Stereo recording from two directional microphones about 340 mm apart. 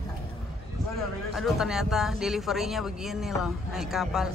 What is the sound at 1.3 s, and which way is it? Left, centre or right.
A man's voice, centre.